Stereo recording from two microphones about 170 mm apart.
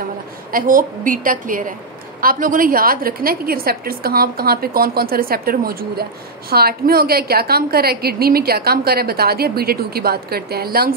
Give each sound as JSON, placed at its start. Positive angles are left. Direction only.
{"t": 0.5, "sound": "a woman's voice", "side_deg": -55}